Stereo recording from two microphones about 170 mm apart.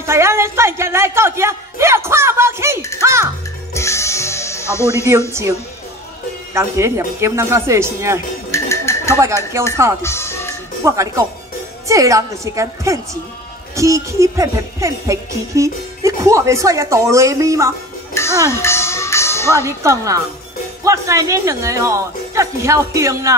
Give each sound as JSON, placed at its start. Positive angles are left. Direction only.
{"t": 0.0, "sound": "music", "side_deg": -15}
{"t": 3.7, "sound": "music", "side_deg": 15}
{"t": 6.5, "sound": "music", "side_deg": -15}
{"t": 8.5, "sound": "music", "side_deg": 15}
{"t": 9.5, "sound": "music", "side_deg": -15}
{"t": 10.0, "sound": "music", "side_deg": 15}
{"t": 10.8, "sound": "music", "side_deg": -20}
{"t": 11.9, "sound": "a woman's voice", "side_deg": -20}
{"t": 13.7, "sound": "music", "side_deg": -20}
{"t": 18.1, "sound": "speech", "side_deg": 15}
{"t": 18.5, "sound": "music", "side_deg": 15}
{"t": 19.6, "sound": "music", "side_deg": -15}